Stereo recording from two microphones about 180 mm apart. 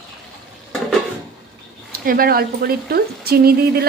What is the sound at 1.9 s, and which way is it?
Speech, 55° right (ahead or behind).